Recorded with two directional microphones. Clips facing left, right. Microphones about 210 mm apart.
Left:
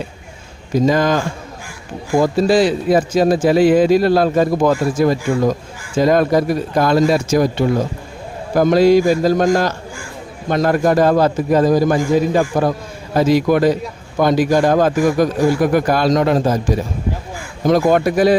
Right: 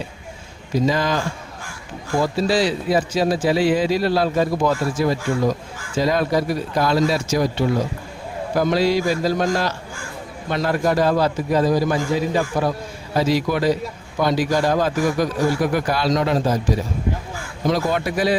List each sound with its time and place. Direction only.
0.7 s a man's voice: 50° left (ahead or behind)
17.7 s a man's voice: 50° left (ahead or behind)